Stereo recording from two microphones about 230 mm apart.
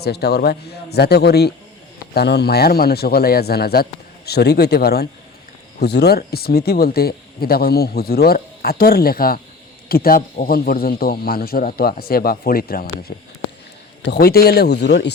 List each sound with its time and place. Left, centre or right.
0.0 s a man's voice: left